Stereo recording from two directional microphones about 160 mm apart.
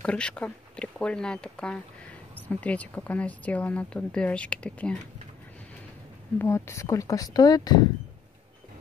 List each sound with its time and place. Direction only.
0.0 s speech: 5° left (ahead or behind)
6.3 s speech: 15° left (ahead or behind)